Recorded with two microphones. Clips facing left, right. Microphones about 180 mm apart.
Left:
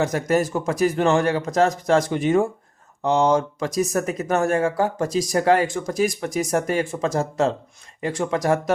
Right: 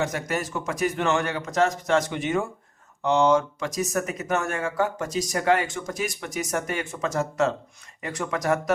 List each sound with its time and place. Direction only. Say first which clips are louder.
0.0 s speech: left 7 dB; 35° left (ahead or behind)